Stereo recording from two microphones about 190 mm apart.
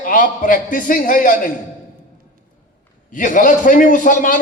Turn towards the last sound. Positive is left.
turn(degrees=45)  # may be behind; listen again after turning